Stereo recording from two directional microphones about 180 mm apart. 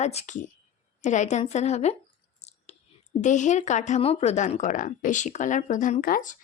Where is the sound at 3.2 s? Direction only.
45° left (ahead or behind).